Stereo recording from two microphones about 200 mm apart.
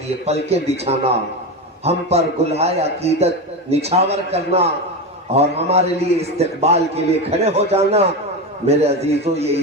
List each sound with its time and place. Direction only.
0.3 s a man's voice: 30° right (ahead or behind)